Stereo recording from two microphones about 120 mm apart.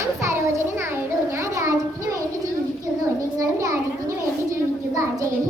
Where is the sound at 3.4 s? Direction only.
30° right (ahead or behind).